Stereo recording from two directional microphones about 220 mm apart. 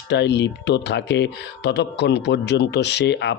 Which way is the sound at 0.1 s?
50° left (ahead or behind).